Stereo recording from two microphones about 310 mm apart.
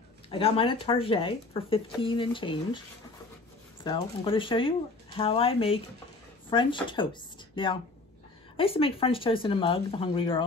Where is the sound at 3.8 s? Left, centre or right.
Centre.